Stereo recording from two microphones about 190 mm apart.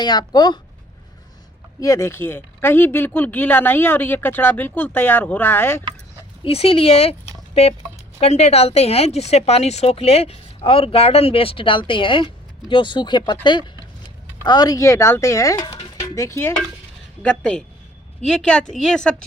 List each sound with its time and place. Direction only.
0.0 s speech: 20° left (ahead or behind)
1.8 s speech: 15° left (ahead or behind)
6.4 s speech: 30° left (ahead or behind); by 19.1 s 5° left (ahead or behind)